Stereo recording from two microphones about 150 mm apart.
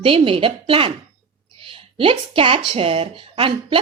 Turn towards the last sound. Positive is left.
turn(degrees=-35)  # may be behind; listen again after turning